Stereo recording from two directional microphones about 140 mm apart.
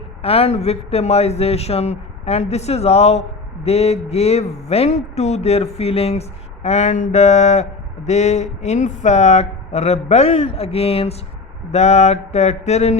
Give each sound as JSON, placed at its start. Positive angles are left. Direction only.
{"t": 0.2, "sound": "a man's voice", "side_deg": 45}